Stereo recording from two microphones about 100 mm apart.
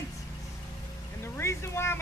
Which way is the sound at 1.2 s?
25° left (ahead or behind).